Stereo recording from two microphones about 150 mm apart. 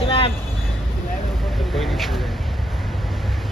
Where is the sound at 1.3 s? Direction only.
Centre (ahead or behind).